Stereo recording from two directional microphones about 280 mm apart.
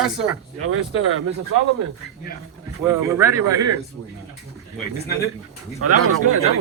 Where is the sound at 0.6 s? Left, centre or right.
Right.